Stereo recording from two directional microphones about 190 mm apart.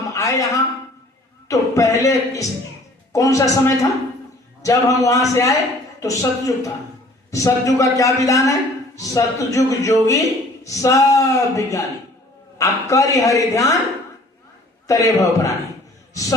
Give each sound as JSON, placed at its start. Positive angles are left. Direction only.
{"t": 0.1, "sound": "a man's voice", "side_deg": 15}
{"t": 14.8, "sound": "a man's voice", "side_deg": 15}